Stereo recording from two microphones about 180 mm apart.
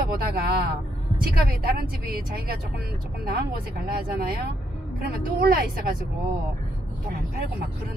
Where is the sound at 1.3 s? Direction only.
55° right (ahead or behind).